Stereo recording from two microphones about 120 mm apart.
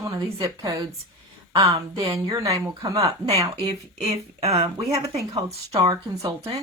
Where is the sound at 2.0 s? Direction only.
25° right (ahead or behind).